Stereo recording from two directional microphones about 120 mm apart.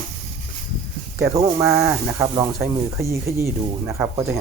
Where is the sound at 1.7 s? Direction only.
25° right (ahead or behind).